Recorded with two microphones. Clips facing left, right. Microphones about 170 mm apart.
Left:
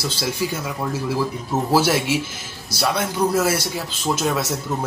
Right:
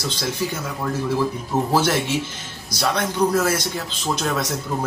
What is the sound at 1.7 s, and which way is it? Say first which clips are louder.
Speech: left 3 dB; 10° left (ahead or behind).